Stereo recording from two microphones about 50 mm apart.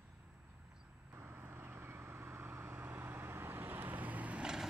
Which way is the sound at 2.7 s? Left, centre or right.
Right.